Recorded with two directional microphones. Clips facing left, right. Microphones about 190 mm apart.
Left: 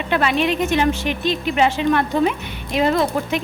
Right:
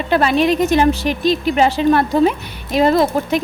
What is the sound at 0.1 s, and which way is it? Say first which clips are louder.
Speech: right 5 dB; 40° right (ahead or behind).